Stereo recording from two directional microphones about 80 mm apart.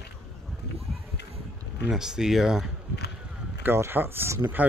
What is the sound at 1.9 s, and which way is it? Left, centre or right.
Speech, centre.